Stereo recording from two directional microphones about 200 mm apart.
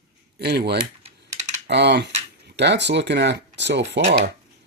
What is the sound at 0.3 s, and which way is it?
Speech, 55° right (ahead or behind).